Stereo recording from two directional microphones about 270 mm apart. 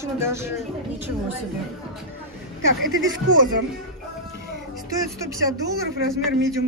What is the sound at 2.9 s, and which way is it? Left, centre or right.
Speech, right.